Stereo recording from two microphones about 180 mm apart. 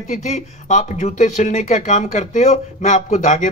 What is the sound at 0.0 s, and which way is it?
Speech, 40° left (ahead or behind).